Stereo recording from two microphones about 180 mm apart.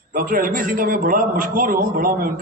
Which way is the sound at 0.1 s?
50° right (ahead or behind).